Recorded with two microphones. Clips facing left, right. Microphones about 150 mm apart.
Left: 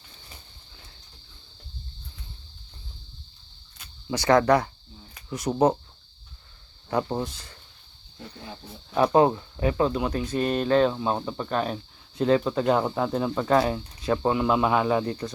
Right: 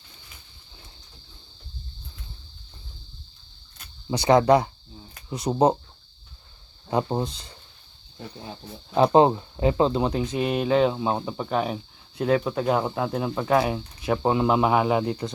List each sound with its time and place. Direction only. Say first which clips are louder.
4.2 s speech: right 2 dB; 15° right (ahead or behind)
5.4 s speech: right 1 dB; 30° right (ahead or behind)
6.9 s speech: right 2 dB; 25° right (ahead or behind)
9.0 s speech: right 2 dB; 25° right (ahead or behind)